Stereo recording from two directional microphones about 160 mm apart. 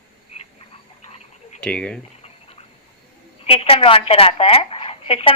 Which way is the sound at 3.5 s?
35° left (ahead or behind).